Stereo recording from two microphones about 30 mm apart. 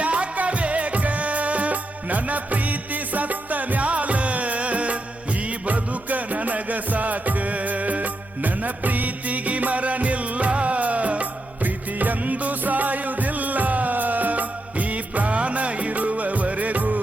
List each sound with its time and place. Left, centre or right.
0.0 s music: right
11.6 s music: right